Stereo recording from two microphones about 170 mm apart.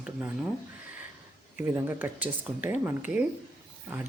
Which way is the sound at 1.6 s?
10° right (ahead or behind).